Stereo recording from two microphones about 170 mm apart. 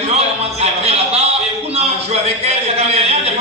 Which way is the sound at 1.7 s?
35° right (ahead or behind).